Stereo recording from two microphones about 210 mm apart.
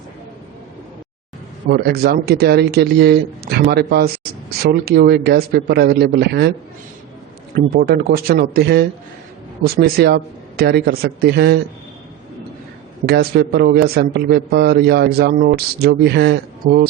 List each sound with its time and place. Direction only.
1.7 s a man's voice: 50° right (ahead or behind)
7.5 s a man's voice: 45° right (ahead or behind)
13.1 s a man's voice: 50° right (ahead or behind)